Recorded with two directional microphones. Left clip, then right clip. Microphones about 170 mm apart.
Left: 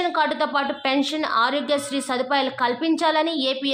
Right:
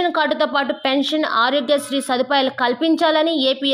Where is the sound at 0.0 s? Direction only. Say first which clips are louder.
Right 4 dB; 25° right (ahead or behind).